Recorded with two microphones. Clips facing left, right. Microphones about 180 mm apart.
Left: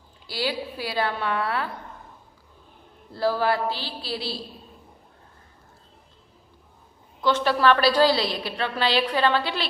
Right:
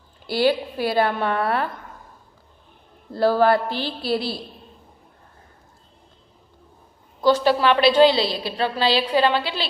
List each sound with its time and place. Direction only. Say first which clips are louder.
0.3 s a man's voice: right 9 dB; 55° right (ahead or behind)
3.1 s a man's voice: right 6 dB; 60° right (ahead or behind)
7.2 s a woman's voice: right 4 dB; 35° right (ahead or behind)